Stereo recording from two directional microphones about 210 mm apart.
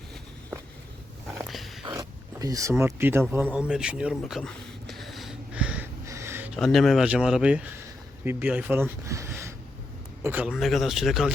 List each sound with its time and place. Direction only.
1.5 s dog: centre (ahead or behind)
1.9 s speech: 15° right (ahead or behind)
3.7 s a sound: 5° right (ahead or behind)
6.6 s speech: centre (ahead or behind)